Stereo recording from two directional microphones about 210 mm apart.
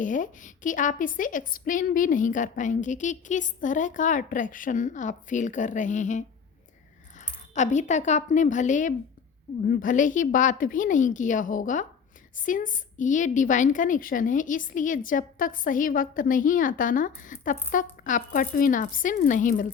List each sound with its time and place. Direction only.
0.0 s a woman's voice: 40° left (ahead or behind)